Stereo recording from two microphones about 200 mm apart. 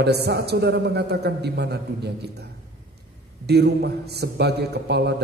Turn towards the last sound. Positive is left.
turn(degrees=-55)  # may be behind; listen again after turning